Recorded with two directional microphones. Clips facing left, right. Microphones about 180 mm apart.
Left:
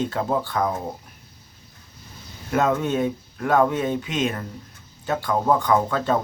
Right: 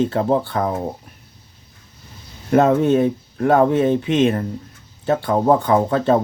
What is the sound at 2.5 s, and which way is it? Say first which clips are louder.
Speech: right 7 dB; 30° right (ahead or behind).